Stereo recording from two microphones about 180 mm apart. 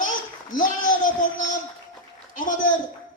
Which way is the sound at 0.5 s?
45° left (ahead or behind).